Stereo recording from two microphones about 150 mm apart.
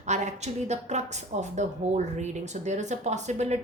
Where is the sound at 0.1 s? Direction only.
50° right (ahead or behind).